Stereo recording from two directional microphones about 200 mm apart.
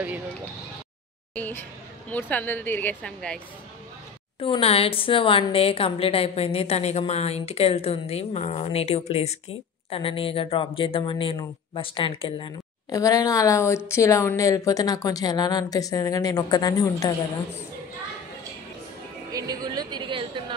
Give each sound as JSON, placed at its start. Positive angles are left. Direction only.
{"t": 1.3, "sound": "speech", "side_deg": 10}
{"t": 4.4, "sound": "a woman's voice", "side_deg": 25}
{"t": 19.3, "sound": "a sound", "side_deg": -20}